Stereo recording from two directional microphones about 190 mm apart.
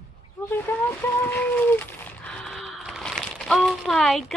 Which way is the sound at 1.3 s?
10° left (ahead or behind).